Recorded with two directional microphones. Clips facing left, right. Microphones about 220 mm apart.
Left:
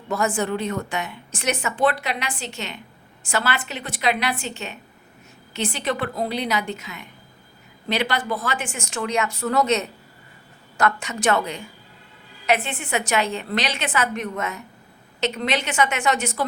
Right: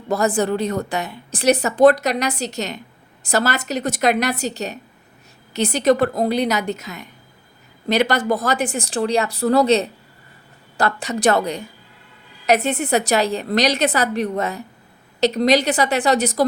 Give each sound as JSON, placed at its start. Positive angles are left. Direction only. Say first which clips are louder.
{"t": 0.1, "sound": "a woman's voice", "louder": "right 4 dB", "side_deg": -35}